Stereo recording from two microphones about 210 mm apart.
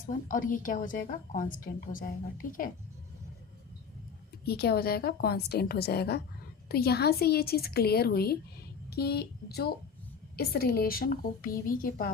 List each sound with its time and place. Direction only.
0.0 s a woman's voice: 40° left (ahead or behind)
4.4 s a woman's voice: 50° left (ahead or behind)